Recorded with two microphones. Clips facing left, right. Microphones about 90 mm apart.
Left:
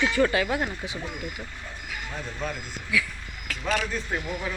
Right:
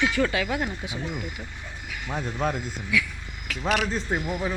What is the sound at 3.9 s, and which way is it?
Speech, 30° right (ahead or behind).